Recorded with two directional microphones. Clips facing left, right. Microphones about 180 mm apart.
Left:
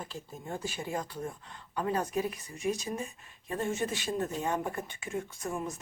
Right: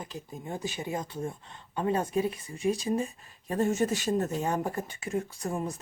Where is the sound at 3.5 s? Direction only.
40° right (ahead or behind).